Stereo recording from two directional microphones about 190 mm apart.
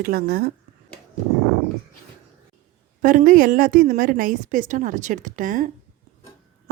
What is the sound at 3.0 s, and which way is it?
Speech, 45° right (ahead or behind).